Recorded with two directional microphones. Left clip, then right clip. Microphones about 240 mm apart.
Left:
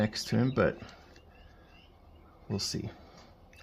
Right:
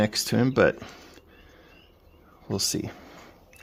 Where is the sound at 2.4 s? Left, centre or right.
Right.